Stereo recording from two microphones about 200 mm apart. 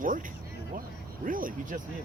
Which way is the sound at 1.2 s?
45° right (ahead or behind).